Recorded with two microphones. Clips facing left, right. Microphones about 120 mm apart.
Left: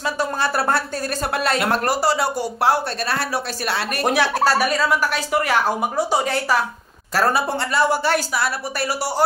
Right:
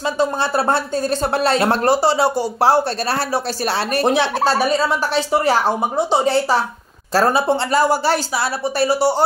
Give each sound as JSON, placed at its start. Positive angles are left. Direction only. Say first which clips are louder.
{"t": 0.2, "sound": "speech", "louder": "right 4 dB", "side_deg": -25}
{"t": 7.7, "sound": "a woman's voice", "louder": "right 1 dB", "side_deg": -35}